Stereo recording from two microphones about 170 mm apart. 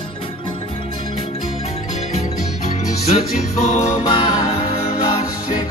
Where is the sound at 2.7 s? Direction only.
40° left (ahead or behind).